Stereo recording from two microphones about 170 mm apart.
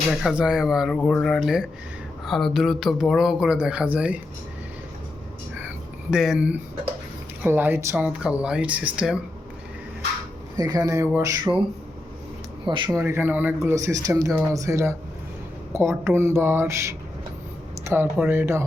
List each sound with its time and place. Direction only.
0.1 s speech: centre (ahead or behind)
6.1 s speech: centre (ahead or behind)
10.6 s speech: 20° right (ahead or behind)
12.6 s speech: 30° right (ahead or behind)
12.9 s speech: 15° right (ahead or behind)